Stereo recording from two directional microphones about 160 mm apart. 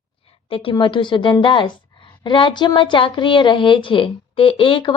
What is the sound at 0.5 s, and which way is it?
A woman's voice, 35° left (ahead or behind).